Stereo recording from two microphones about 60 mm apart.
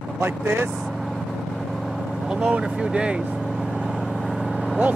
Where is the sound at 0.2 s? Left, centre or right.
Right.